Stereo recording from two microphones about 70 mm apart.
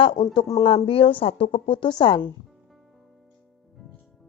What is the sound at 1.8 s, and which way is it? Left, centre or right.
Speech, left.